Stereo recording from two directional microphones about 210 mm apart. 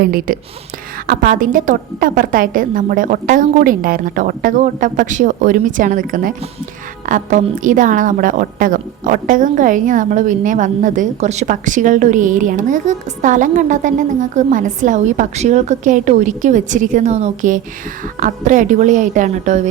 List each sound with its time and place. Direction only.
0.0 s a woman's voice: 45° right (ahead or behind)